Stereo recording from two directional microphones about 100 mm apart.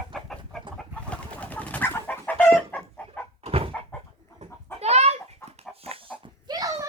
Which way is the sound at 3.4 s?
75° right (ahead or behind).